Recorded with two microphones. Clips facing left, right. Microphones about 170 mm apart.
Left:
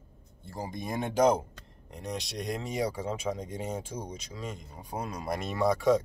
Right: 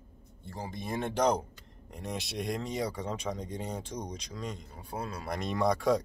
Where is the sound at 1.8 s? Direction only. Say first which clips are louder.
Left 1 dB; centre (ahead or behind).